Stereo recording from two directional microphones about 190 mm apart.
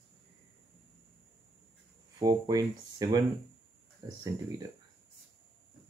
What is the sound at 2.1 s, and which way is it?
Speech, 20° right (ahead or behind).